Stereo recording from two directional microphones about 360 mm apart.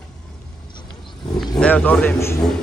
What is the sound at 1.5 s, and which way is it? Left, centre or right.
Speech, centre.